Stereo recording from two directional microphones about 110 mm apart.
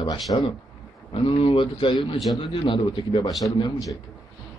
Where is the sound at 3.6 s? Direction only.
35° left (ahead or behind).